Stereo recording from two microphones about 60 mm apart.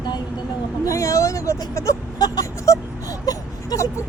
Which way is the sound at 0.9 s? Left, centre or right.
Left.